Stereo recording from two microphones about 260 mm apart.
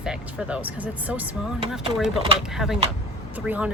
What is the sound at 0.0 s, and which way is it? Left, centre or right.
Speech, centre.